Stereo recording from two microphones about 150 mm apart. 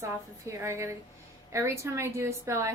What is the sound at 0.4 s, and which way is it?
A woman's voice, 20° right (ahead or behind).